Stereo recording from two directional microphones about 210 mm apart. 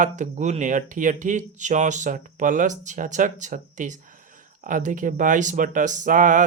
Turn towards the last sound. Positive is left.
turn(degrees=-40)  # may be behind; listen again after turning